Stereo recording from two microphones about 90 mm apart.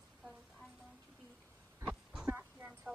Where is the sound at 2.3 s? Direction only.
25° right (ahead or behind).